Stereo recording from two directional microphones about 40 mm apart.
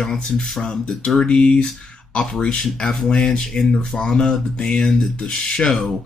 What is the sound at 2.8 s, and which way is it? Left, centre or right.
Speech, centre.